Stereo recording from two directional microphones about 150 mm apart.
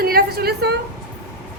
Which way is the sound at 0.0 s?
90° right.